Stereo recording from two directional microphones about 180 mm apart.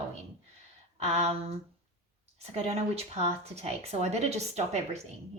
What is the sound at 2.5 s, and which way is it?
Speech, 35° right (ahead or behind).